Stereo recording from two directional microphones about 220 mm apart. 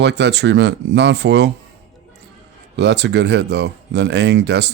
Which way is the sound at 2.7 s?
50° right (ahead or behind).